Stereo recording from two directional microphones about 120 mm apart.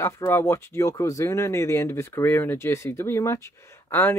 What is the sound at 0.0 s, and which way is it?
Speech, 20° left (ahead or behind).